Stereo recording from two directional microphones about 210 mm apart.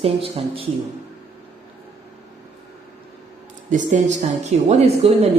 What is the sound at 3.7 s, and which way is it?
A woman's voice, 35° right (ahead or behind).